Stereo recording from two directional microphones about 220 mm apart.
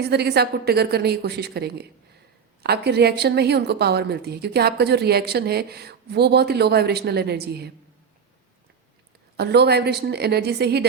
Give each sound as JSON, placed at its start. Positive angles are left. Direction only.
{"t": 0.0, "sound": "a woman's voice", "side_deg": -50}
{"t": 9.4, "sound": "a woman's voice", "side_deg": -50}